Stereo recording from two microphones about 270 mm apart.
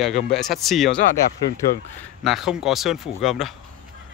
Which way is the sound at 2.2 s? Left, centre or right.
Centre.